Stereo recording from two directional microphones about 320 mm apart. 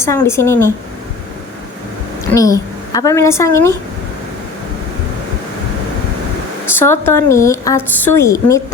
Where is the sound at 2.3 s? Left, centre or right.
Centre.